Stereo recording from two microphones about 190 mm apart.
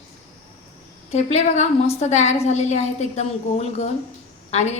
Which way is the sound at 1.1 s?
35° left (ahead or behind).